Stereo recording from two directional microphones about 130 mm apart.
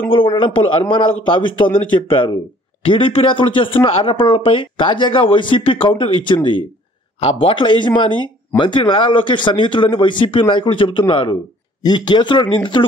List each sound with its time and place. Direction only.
0.1 s speech: 40° left (ahead or behind)